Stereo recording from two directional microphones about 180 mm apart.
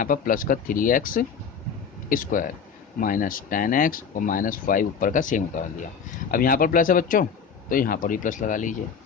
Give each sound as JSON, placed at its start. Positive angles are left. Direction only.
{"t": 0.0, "sound": "speech", "side_deg": 50}